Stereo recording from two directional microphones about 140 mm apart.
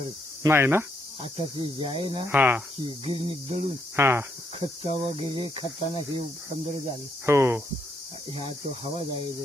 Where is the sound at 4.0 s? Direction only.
20° right (ahead or behind).